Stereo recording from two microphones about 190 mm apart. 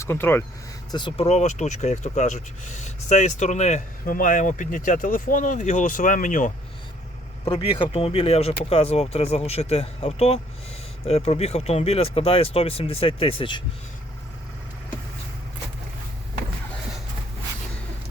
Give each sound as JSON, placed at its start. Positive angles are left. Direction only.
{"t": 0.0, "sound": "speech", "side_deg": 10}
{"t": 0.9, "sound": "speech", "side_deg": 25}
{"t": 7.4, "sound": "speech", "side_deg": 30}